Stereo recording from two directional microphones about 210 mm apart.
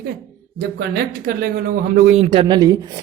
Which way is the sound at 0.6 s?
45° right (ahead or behind).